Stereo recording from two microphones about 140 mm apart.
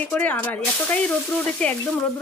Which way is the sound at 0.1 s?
10° left (ahead or behind).